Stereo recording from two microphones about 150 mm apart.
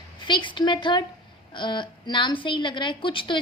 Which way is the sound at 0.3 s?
30° left (ahead or behind).